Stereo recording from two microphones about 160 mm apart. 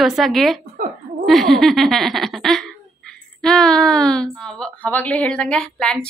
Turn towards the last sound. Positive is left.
turn(degrees=5)  # may be behind; listen again after turning